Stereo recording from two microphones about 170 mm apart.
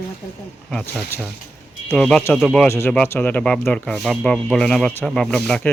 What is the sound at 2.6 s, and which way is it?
A woman's voice, 15° left (ahead or behind).